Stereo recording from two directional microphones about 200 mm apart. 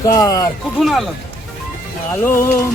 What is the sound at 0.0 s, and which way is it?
Speech, 15° left (ahead or behind).